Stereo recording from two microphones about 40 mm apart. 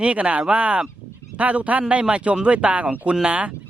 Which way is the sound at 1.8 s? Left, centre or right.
Right.